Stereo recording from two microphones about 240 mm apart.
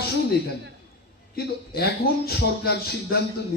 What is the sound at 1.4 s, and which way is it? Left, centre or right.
A man's voice, left.